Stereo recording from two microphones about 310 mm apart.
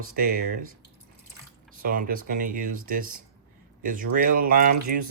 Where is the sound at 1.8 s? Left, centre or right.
Right.